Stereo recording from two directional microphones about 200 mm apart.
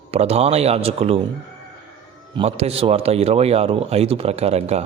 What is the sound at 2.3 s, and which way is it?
A man's voice, 30° right (ahead or behind).